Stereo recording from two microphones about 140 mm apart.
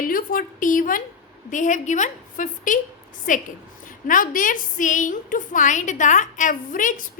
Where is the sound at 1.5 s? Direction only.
60° left (ahead or behind).